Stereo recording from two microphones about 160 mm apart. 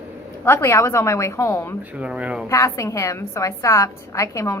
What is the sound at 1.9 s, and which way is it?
Speech, 10° right (ahead or behind).